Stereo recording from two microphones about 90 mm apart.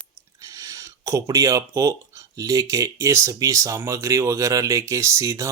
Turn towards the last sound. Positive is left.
turn(degrees=-35)  # may be behind; listen again after turning